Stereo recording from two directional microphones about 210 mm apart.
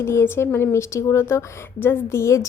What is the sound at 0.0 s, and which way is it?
A woman's voice, 10° left (ahead or behind).